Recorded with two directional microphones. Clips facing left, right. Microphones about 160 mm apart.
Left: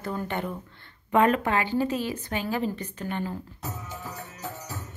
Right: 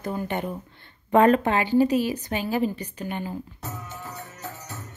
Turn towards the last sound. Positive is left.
turn(degrees=-15)  # may be behind; listen again after turning